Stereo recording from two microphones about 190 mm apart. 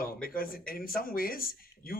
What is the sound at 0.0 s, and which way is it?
Speech, 50° left (ahead or behind).